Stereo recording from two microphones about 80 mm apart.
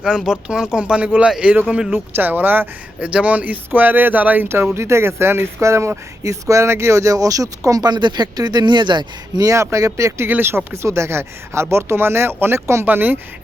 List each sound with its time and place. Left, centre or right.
0.0 s speech: centre
1.9 s speech: right
4.7 s speech: right
9.4 s speech: right
10.2 s speech: right
12.8 s speech: right